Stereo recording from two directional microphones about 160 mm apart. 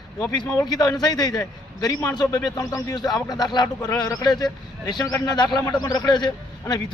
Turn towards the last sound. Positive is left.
turn(degrees=25)  # may be behind; listen again after turning